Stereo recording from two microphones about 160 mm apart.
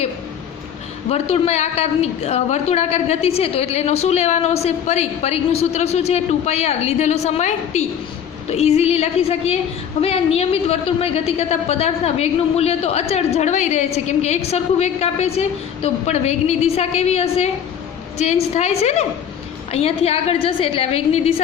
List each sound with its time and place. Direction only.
1.1 s a woman's voice: 40° left (ahead or behind)